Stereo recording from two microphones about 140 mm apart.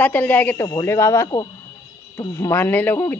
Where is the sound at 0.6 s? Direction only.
25° left (ahead or behind).